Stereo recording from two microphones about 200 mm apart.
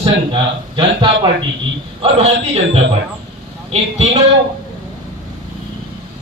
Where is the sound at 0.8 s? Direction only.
25° right (ahead or behind).